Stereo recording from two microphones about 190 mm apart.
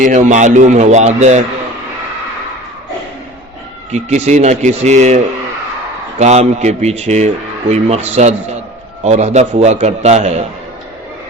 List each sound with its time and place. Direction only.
0.0 s speech: 40° right (ahead or behind)
3.9 s speech: 35° right (ahead or behind)